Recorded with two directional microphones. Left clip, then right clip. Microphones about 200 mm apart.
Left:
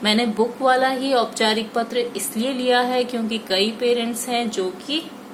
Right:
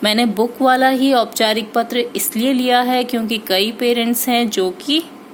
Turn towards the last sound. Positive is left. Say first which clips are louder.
# right 7 dB
turn(degrees=-50)  # may be behind; listen again after turning